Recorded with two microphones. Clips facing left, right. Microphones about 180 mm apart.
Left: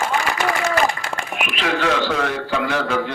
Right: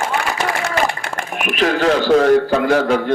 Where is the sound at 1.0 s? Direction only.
50° right (ahead or behind).